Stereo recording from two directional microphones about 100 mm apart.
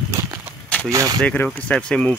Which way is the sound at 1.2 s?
15° left (ahead or behind).